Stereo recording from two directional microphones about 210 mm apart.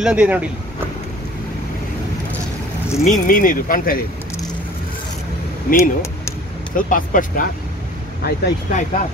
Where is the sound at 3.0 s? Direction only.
40° left (ahead or behind).